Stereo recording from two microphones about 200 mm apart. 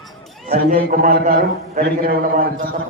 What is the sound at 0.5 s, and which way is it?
A man's voice, 50° right (ahead or behind).